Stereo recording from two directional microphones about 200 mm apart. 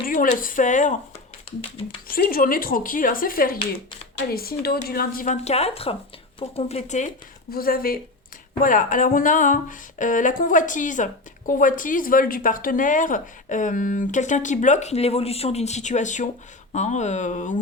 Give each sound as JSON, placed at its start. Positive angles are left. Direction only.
{"t": 0.0, "sound": "speech", "side_deg": 45}
{"t": 2.0, "sound": "speech", "side_deg": 45}
{"t": 7.5, "sound": "speech", "side_deg": 45}